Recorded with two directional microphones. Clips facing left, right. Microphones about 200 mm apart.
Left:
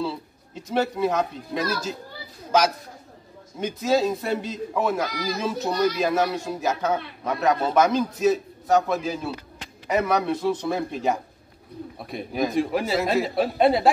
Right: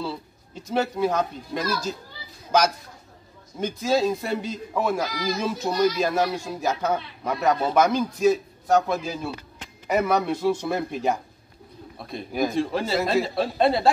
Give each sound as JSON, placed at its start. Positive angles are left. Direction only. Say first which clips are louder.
{"t": 0.7, "sound": "speech", "louder": "even", "side_deg": 0}
{"t": 3.5, "sound": "speech", "louder": "left 1 dB", "side_deg": 0}
{"t": 12.0, "sound": "speech", "louder": "even", "side_deg": 10}
{"t": 12.3, "sound": "speech", "louder": "even", "side_deg": 0}
{"t": 12.5, "sound": "speech", "louder": "left 1 dB", "side_deg": 15}